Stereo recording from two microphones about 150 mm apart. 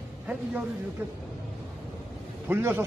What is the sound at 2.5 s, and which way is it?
Speech, 15° right (ahead or behind).